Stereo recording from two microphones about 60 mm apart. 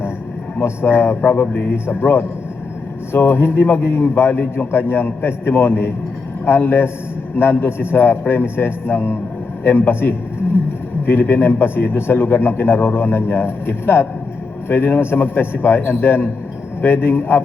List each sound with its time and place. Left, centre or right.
0.6 s a man's voice: left